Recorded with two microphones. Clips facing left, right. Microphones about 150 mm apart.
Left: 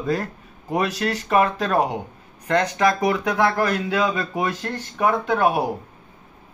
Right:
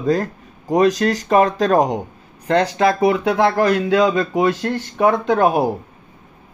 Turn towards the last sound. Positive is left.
turn(degrees=-30)  # may be behind; listen again after turning